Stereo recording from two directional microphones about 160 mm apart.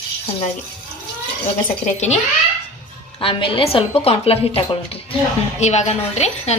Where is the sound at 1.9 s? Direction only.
45° left (ahead or behind).